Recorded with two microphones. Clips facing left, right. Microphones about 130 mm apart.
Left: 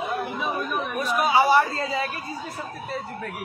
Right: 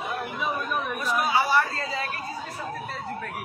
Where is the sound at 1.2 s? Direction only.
20° left (ahead or behind).